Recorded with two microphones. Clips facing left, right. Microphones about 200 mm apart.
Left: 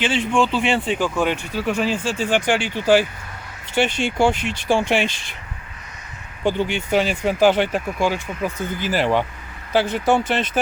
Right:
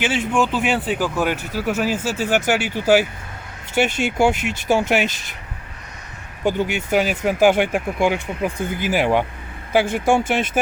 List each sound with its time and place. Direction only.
0.0 s speech: 10° right (ahead or behind)
6.4 s speech: 10° right (ahead or behind)